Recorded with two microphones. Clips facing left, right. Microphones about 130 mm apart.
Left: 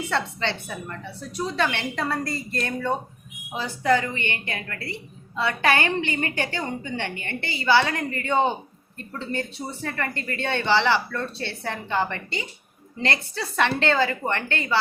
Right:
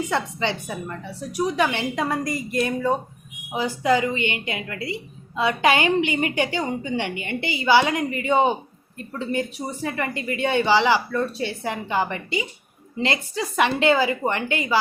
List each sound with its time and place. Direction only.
0.0 s speech: 15° right (ahead or behind)